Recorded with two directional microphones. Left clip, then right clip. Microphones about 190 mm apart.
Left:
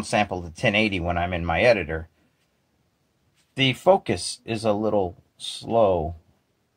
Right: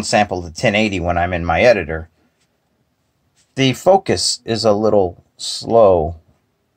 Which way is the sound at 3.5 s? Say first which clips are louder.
Right 6 dB; 15° right (ahead or behind).